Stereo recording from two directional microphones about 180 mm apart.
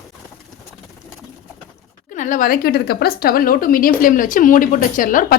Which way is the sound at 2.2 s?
45° left (ahead or behind).